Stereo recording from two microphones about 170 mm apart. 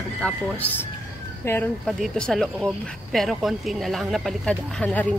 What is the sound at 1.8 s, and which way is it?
Speech, 5° left (ahead or behind).